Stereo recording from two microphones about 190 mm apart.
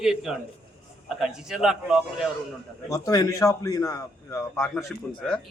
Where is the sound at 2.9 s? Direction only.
20° left (ahead or behind).